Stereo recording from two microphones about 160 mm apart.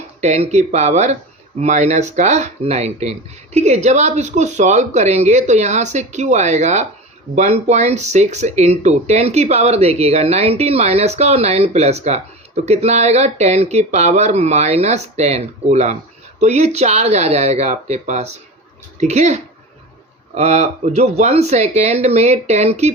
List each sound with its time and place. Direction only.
0.2 s speech: 45° right (ahead or behind)